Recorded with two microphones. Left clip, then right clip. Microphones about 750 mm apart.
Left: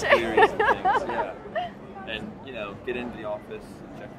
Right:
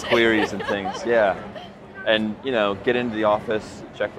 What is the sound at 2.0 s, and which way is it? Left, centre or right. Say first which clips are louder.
Speech: right 15 dB; right.